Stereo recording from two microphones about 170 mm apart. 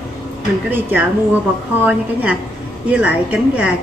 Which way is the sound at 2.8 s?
5° right (ahead or behind).